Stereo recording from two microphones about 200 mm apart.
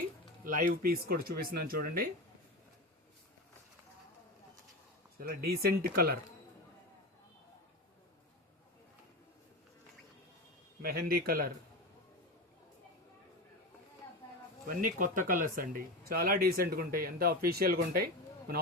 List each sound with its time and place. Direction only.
0.4 s speech: 45° right (ahead or behind)
5.2 s speech: 50° right (ahead or behind)
10.8 s speech: 50° right (ahead or behind)
14.7 s speech: 45° right (ahead or behind)